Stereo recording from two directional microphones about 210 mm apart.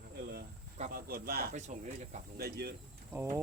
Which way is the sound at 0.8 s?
45° right (ahead or behind).